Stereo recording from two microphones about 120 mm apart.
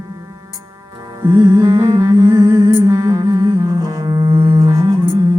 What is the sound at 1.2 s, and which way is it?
Music, 25° right (ahead or behind).